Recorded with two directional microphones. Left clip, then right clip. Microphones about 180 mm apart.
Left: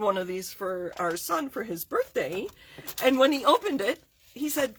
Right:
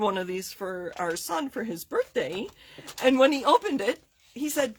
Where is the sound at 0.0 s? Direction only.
45° right (ahead or behind).